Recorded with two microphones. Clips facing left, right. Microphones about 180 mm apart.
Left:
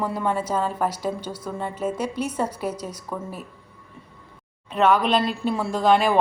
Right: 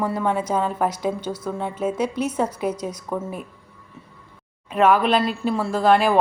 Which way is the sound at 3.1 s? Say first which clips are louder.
Right 5 dB; 20° right (ahead or behind).